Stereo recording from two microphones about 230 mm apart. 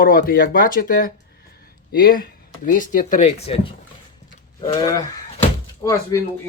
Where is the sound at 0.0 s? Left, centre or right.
Left.